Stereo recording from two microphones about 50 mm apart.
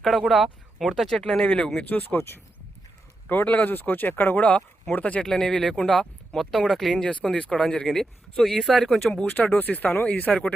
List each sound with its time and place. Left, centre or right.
0.0 s speech: centre; by 1.8 s left
1.8 s speech: left
3.4 s speech: left
5.2 s speech: centre
6.9 s speech: left
7.9 s speech: centre
9.2 s speech: left
10.3 s speech: left